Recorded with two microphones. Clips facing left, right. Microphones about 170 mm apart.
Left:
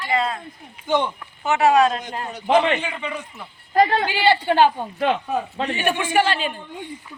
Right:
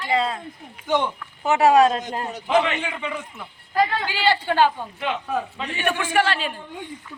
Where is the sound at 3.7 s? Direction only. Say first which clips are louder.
Left 4 dB; 45° left (ahead or behind).